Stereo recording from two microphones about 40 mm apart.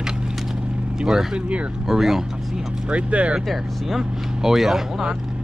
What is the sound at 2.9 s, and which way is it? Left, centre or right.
Speech, right.